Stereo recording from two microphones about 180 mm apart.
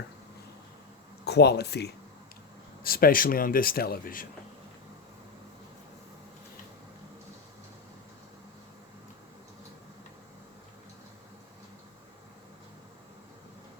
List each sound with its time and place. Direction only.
1.2 s speech: 65° left (ahead or behind)
2.8 s speech: 55° left (ahead or behind)